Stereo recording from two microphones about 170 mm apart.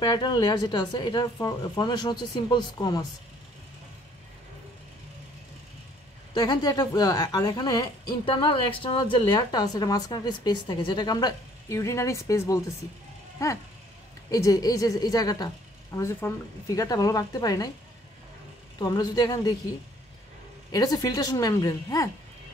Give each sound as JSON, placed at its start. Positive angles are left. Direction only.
{"t": 0.0, "sound": "a woman's voice", "side_deg": 25}
{"t": 6.3, "sound": "a woman's voice", "side_deg": 25}
{"t": 14.3, "sound": "a woman's voice", "side_deg": 20}
{"t": 18.8, "sound": "a woman's voice", "side_deg": 25}
{"t": 20.7, "sound": "a woman's voice", "side_deg": 20}